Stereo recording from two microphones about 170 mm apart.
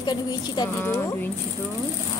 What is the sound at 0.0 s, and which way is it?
A woman's voice, 25° left (ahead or behind).